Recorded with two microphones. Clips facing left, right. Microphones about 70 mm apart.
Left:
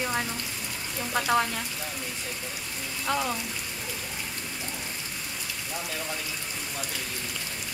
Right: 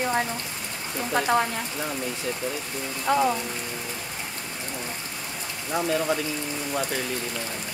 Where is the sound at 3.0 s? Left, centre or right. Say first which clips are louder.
Right 7 dB; centre.